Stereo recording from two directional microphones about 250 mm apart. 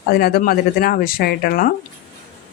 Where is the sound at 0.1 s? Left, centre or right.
Left.